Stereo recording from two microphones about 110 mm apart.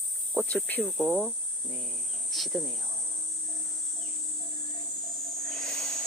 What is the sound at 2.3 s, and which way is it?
Speech, centre (ahead or behind).